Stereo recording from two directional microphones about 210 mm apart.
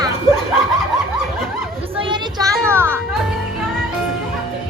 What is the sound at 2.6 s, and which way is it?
Music, 10° right (ahead or behind).